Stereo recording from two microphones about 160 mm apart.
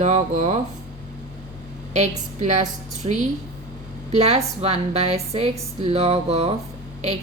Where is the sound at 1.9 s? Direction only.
45° right (ahead or behind).